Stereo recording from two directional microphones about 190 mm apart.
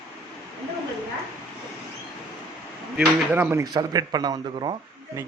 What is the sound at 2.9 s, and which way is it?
A man's voice, 10° right (ahead or behind).